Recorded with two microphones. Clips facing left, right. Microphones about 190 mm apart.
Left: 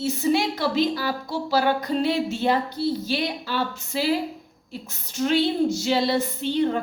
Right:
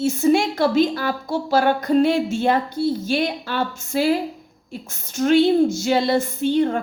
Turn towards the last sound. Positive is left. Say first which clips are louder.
# right 4 dB
turn(degrees=-50)  # may be behind; listen again after turning